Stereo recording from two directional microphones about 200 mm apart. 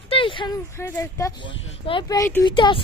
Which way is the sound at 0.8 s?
15° left (ahead or behind).